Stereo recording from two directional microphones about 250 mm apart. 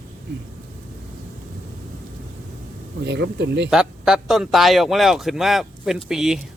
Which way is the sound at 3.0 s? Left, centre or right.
Right.